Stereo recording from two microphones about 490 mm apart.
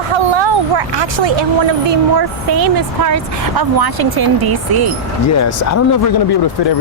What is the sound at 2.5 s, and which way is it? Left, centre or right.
A woman's voice, right.